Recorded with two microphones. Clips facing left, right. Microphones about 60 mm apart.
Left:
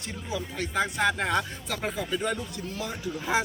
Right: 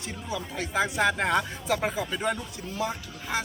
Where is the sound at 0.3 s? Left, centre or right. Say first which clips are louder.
Even; centre.